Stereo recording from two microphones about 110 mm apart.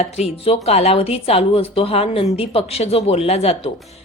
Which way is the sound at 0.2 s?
75° left (ahead or behind).